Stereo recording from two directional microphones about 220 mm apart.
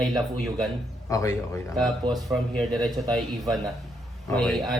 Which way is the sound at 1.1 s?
15° left (ahead or behind).